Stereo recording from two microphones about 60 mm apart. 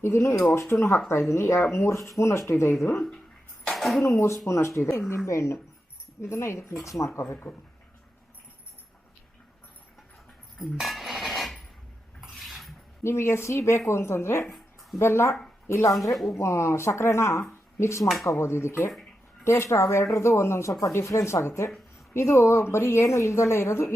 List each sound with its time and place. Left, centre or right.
0.0 s a woman's voice: left
3.6 s a sound: centre
4.0 s a woman's voice: left
10.6 s a sound: centre
12.2 s dishes: centre
13.0 s a woman's voice: left
14.4 s a sound: centre
14.9 s a woman's voice: left
20.8 s a woman's voice: left